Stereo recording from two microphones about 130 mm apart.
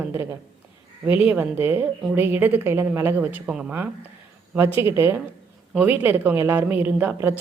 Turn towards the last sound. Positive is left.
turn(degrees=-15)  # may be behind; listen again after turning